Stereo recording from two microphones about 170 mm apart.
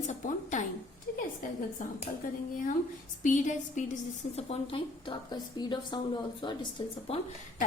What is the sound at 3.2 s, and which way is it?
A woman's voice, 45° left (ahead or behind).